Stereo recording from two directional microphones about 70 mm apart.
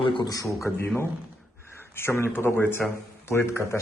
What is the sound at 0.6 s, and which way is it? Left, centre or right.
A man's voice, left.